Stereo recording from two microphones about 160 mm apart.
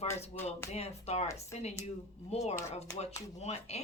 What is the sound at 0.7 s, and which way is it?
Speech, 40° left (ahead or behind).